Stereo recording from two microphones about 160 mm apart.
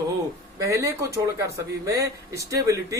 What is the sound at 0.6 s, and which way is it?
Speech, 20° right (ahead or behind).